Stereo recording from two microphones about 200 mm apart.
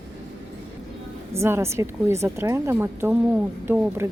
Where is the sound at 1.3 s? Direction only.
15° right (ahead or behind).